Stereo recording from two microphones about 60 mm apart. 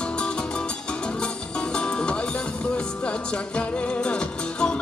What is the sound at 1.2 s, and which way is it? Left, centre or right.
Music, centre.